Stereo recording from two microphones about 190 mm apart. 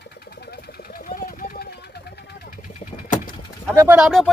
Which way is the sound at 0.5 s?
55° left (ahead or behind).